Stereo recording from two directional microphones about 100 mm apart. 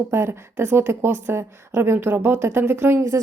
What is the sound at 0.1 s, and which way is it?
A woman's voice, 25° right (ahead or behind).